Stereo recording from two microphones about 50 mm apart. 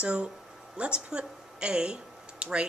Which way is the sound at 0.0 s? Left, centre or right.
Right.